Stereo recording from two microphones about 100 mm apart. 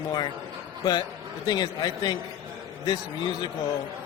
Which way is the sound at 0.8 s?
40° left (ahead or behind).